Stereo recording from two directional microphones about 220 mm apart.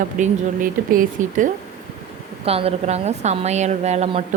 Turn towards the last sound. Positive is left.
turn(degrees=-30)  # may be behind; listen again after turning